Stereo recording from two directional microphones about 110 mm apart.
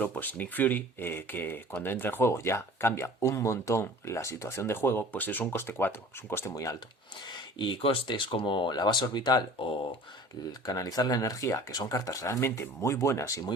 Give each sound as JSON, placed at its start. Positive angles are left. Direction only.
{"t": 0.0, "sound": "speech", "side_deg": 15}
{"t": 6.5, "sound": "speech", "side_deg": 30}
{"t": 7.3, "sound": "speech", "side_deg": 45}
{"t": 10.7, "sound": "speech", "side_deg": 35}